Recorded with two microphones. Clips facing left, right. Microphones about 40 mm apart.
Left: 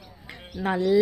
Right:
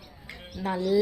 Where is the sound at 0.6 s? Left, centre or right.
Left.